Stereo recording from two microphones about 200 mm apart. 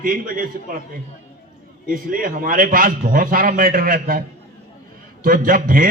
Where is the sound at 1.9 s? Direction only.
45° right (ahead or behind).